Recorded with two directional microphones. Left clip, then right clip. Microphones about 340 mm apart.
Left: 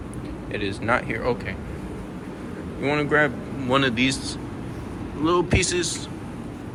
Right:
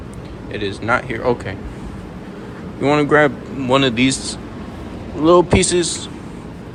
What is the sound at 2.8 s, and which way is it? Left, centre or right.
Speech, centre.